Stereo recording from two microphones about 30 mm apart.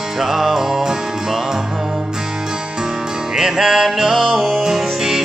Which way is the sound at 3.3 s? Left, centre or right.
Centre.